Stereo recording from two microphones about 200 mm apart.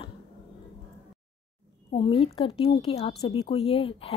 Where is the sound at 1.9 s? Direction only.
25° left (ahead or behind).